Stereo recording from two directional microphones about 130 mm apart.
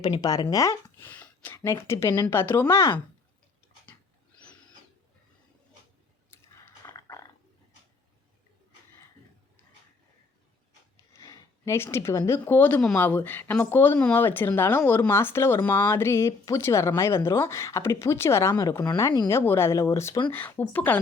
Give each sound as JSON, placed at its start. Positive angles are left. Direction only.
{"t": 0.0, "sound": "speech", "side_deg": 30}
{"t": 0.5, "sound": "a sound", "side_deg": 25}
{"t": 1.5, "sound": "speech", "side_deg": 20}
{"t": 3.9, "sound": "dog", "side_deg": 20}
{"t": 6.7, "sound": "dog", "side_deg": 25}
{"t": 11.1, "sound": "speech", "side_deg": 25}
{"t": 19.3, "sound": "speech", "side_deg": 20}